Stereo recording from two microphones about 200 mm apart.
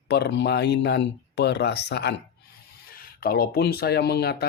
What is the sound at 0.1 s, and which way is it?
Speech, 60° left (ahead or behind).